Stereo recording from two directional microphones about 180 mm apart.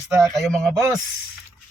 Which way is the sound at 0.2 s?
Centre (ahead or behind).